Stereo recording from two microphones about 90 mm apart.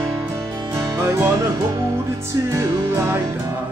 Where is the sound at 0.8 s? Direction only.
30° right (ahead or behind).